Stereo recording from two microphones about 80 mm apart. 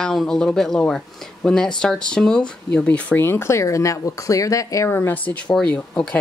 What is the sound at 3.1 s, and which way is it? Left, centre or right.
Speech, left.